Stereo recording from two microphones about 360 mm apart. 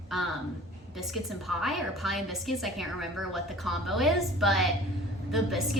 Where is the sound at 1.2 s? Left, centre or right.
Centre.